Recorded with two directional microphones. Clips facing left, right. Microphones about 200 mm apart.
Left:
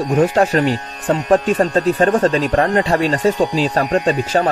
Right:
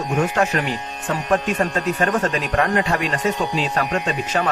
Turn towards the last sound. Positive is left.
turn(degrees=35)  # may be behind; listen again after turning